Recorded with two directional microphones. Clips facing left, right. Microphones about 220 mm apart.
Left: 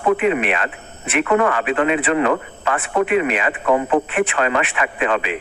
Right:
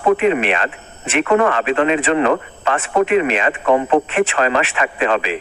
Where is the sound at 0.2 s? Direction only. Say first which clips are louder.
Right 2 dB; 30° right (ahead or behind).